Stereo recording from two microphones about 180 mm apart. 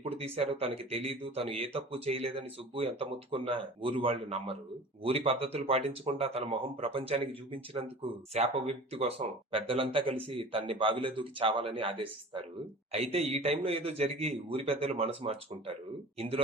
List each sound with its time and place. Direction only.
0.0 s speech: 30° right (ahead or behind)